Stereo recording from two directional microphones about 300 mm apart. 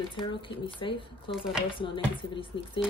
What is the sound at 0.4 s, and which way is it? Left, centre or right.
Speech, centre.